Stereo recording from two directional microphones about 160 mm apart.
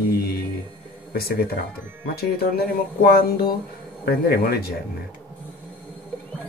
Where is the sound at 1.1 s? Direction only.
75° left (ahead or behind).